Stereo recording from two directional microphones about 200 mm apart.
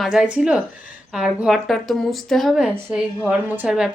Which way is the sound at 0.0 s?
5° right (ahead or behind).